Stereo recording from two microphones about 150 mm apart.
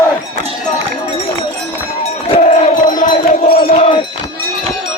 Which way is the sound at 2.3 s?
55° left (ahead or behind).